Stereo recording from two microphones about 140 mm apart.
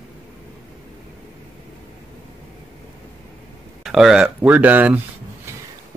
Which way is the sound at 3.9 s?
5° right (ahead or behind).